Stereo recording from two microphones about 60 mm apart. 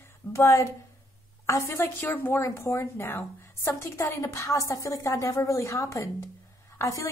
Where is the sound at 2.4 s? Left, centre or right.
Left.